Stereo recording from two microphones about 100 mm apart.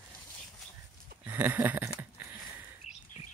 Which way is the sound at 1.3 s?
20° right (ahead or behind).